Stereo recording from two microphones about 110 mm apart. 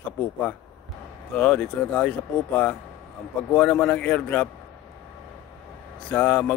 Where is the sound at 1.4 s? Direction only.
10° left (ahead or behind).